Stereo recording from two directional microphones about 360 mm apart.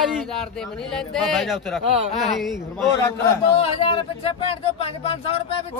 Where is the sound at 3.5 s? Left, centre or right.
Centre.